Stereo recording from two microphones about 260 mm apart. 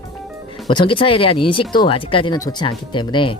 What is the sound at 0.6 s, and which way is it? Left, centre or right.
Speech, centre.